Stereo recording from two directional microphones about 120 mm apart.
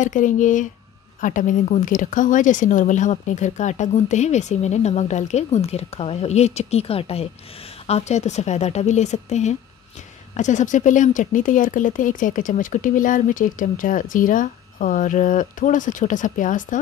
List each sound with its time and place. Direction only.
0.0 s speech: 90° left; by 7.2 s 55° left (ahead or behind)
7.8 s speech: 65° left (ahead or behind)
10.3 s speech: 90° left